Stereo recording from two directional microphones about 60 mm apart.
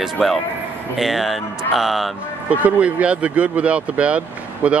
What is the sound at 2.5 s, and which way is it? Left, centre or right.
Speech, right.